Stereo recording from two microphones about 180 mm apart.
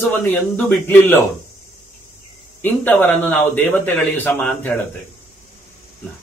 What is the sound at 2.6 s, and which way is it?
A man's voice, 10° left (ahead or behind).